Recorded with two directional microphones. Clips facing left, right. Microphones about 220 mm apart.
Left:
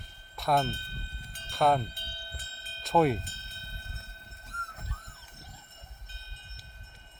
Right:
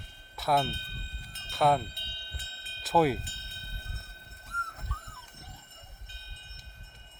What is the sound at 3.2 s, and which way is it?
Speech, 45° left (ahead or behind).